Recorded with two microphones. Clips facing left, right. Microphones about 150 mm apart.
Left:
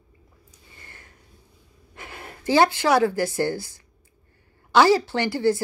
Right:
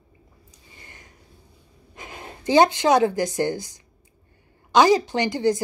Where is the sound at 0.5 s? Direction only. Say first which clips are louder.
Even; 15° right (ahead or behind).